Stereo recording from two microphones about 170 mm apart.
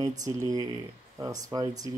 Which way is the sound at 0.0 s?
20° right (ahead or behind).